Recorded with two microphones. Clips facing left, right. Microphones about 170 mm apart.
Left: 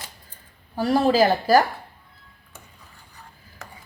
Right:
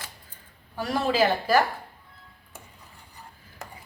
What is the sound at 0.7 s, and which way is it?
Speech, 35° left (ahead or behind).